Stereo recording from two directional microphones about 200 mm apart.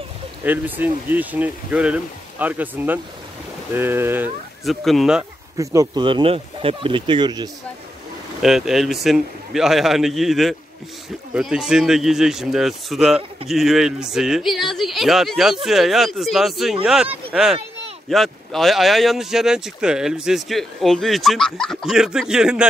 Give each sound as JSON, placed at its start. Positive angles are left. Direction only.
{"t": 0.4, "sound": "speech", "side_deg": -10}
{"t": 4.6, "sound": "speech", "side_deg": 0}
{"t": 5.6, "sound": "speech", "side_deg": -15}
{"t": 8.4, "sound": "speech", "side_deg": 0}